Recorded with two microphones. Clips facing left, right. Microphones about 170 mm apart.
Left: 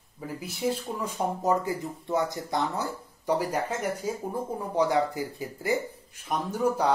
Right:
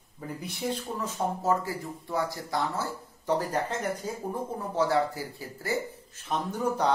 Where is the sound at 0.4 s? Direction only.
Centre (ahead or behind).